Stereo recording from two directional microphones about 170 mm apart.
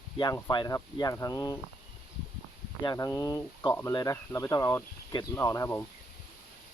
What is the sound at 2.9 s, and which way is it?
Speech, 20° left (ahead or behind).